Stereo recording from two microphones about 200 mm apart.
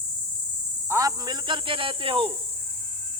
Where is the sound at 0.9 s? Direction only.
15° right (ahead or behind).